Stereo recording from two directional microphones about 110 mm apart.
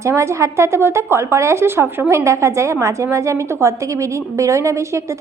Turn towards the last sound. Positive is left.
turn(degrees=-25)  # may be behind; listen again after turning